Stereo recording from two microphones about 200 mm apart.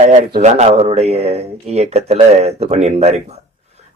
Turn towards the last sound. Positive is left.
turn(degrees=-30)  # may be behind; listen again after turning